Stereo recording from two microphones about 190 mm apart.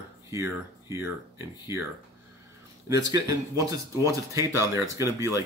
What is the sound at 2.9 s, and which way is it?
Speech, 20° right (ahead or behind).